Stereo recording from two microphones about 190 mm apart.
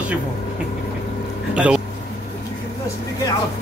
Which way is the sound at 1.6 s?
5° right (ahead or behind).